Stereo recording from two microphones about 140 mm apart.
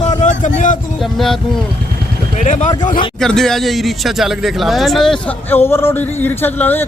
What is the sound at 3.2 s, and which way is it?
Speech, 5° left (ahead or behind).